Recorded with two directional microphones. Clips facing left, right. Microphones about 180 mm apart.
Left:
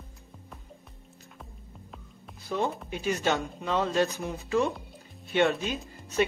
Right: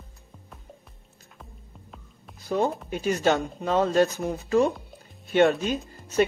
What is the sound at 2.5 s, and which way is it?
Speech, 40° right (ahead or behind).